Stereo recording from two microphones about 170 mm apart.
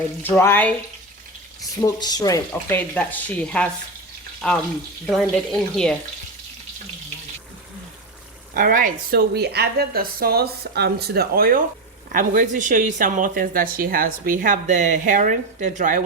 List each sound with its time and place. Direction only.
0.2 s speech: 15° left (ahead or behind)
1.7 s speech: 25° left (ahead or behind); by 6.0 s 5° left (ahead or behind)
8.5 s a woman's voice: 55° right (ahead or behind)